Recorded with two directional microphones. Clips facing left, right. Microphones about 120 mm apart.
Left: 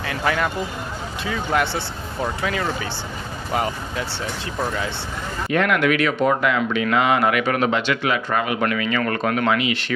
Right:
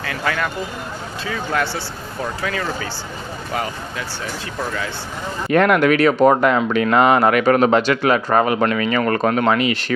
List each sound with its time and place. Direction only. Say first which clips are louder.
0.0 s speech: left 1 dB; 20° left (ahead or behind)
5.5 s speech: right 5 dB; 40° right (ahead or behind)